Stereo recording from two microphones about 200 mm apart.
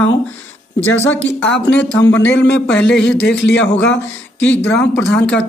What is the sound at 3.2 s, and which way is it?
Speech, 60° left (ahead or behind).